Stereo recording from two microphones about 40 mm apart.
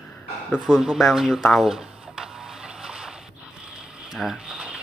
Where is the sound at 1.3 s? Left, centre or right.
Centre.